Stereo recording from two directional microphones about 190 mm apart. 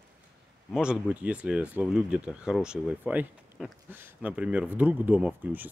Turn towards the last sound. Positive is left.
turn(degrees=-10)  # may be behind; listen again after turning